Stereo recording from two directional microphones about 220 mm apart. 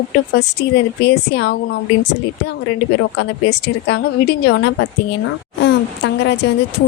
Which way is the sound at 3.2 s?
50° left (ahead or behind).